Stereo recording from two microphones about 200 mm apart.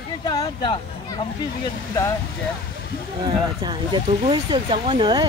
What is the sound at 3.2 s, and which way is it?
Speech, 20° right (ahead or behind).